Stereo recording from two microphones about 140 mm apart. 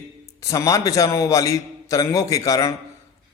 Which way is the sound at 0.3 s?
25° left (ahead or behind).